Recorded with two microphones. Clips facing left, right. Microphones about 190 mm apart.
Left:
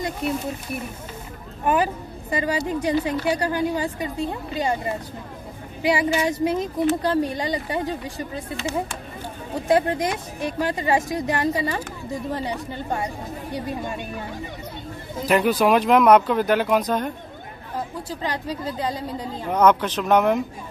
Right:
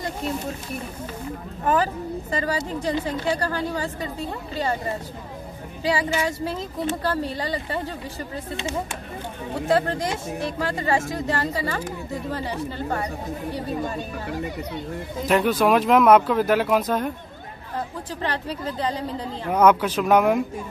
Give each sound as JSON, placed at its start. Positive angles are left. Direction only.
{"t": 2.3, "sound": "speech", "side_deg": 15}
{"t": 5.8, "sound": "speech", "side_deg": 15}
{"t": 9.7, "sound": "speech", "side_deg": 15}
{"t": 15.2, "sound": "speech", "side_deg": 0}
{"t": 17.7, "sound": "speech", "side_deg": 15}
{"t": 19.5, "sound": "speech", "side_deg": -10}